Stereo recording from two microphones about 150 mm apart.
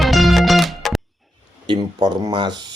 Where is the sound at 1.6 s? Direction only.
30° right (ahead or behind).